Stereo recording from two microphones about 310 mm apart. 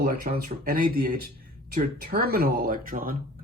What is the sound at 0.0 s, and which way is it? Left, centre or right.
Speech, right.